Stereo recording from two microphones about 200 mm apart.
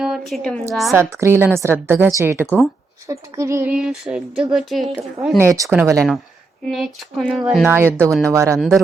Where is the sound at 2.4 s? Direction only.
10° left (ahead or behind).